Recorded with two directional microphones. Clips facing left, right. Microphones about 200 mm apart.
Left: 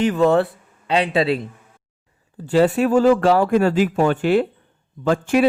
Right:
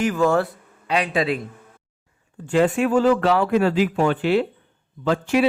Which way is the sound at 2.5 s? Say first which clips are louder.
Left 2 dB; 35° left (ahead or behind).